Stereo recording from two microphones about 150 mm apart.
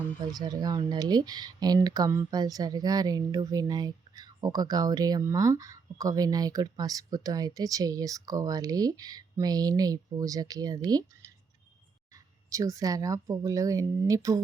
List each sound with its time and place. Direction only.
0.3 s speech: 25° right (ahead or behind)